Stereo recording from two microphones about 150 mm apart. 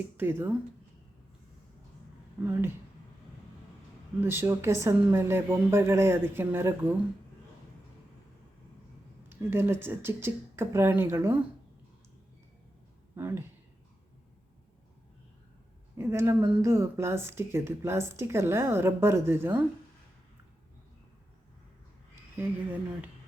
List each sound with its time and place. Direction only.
0.2 s speech: 15° right (ahead or behind)
2.5 s speech: 15° right (ahead or behind)
4.2 s speech: 15° right (ahead or behind)
9.3 s speech: 15° right (ahead or behind)
13.1 s speech: 15° right (ahead or behind)
16.0 s speech: 15° right (ahead or behind)
22.4 s speech: 10° right (ahead or behind)